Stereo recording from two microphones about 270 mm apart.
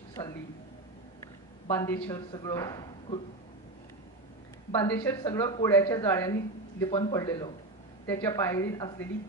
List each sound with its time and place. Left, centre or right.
0.2 s a sound: centre
1.7 s a woman's voice: centre
4.7 s a woman's voice: centre